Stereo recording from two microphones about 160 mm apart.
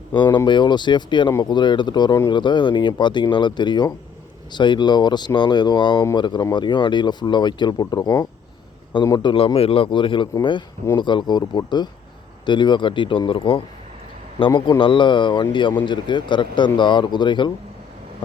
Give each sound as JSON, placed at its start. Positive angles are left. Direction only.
{"t": 0.1, "sound": "speech", "side_deg": 30}